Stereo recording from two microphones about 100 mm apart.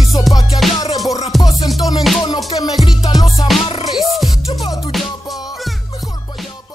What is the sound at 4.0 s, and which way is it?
Music, centre (ahead or behind).